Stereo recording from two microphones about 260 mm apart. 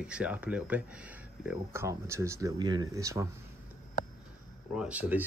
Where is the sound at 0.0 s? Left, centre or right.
Centre.